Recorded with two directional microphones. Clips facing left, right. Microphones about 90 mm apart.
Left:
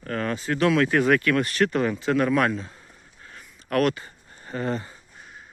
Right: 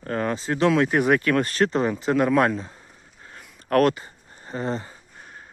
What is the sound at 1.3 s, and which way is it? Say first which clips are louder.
Speech: right 1 dB; 35° right (ahead or behind).